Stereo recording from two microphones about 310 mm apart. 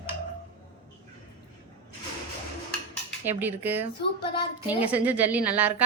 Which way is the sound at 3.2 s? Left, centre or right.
Centre.